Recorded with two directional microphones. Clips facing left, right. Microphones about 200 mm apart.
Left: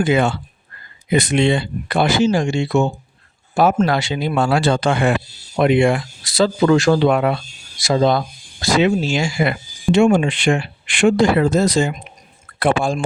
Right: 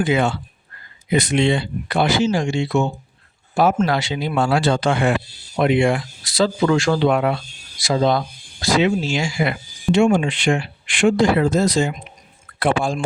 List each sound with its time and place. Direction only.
0.0 s speech: 50° left (ahead or behind)